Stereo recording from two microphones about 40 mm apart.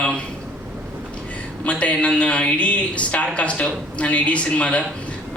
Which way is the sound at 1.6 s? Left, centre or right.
Left.